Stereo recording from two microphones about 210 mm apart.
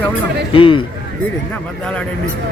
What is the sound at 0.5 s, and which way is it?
Speech, 25° left (ahead or behind).